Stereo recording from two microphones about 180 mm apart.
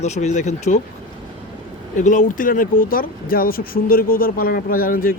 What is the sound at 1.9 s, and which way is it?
Speech, 45° left (ahead or behind).